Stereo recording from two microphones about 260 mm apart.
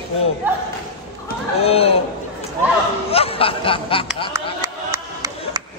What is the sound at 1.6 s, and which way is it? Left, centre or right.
Snicker, left.